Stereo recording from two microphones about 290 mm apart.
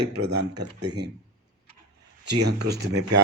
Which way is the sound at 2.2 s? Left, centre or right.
Right.